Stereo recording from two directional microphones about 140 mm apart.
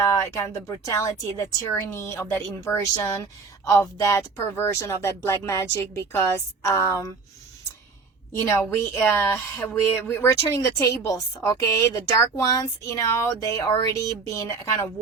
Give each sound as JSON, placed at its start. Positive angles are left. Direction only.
{"t": 0.0, "sound": "a woman's voice", "side_deg": 20}
{"t": 8.4, "sound": "a woman's voice", "side_deg": 20}